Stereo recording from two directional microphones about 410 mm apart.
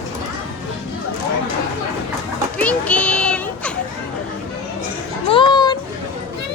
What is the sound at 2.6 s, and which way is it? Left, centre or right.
Children playing, centre.